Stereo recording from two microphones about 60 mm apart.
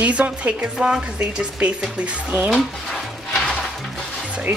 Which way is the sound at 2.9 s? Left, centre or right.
Centre.